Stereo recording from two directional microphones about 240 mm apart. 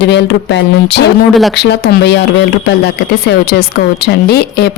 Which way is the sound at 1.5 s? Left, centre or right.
Left.